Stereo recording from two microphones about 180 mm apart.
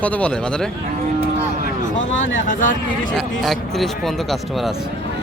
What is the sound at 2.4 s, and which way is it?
Speech, 45° left (ahead or behind).